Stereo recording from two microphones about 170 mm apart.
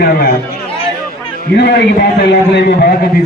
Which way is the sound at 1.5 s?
85° left.